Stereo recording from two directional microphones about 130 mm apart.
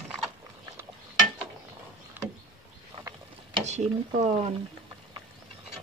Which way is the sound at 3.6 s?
60° right (ahead or behind).